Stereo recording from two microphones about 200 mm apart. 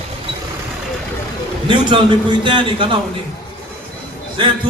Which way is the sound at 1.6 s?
25° right (ahead or behind).